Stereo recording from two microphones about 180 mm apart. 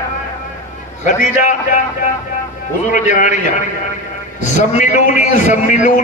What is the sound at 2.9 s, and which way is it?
Speech, 45° left (ahead or behind).